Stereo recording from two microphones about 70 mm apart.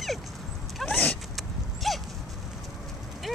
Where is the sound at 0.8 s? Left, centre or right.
Left.